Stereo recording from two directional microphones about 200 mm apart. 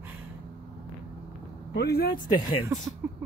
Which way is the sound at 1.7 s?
55° left (ahead or behind).